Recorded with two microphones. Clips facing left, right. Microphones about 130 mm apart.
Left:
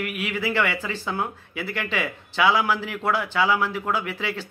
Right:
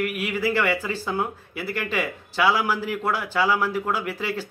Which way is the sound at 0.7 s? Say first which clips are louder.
Right 3 dB; 10° right (ahead or behind).